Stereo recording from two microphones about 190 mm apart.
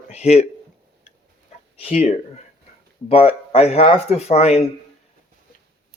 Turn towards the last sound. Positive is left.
turn(degrees=35)  # may be behind; listen again after turning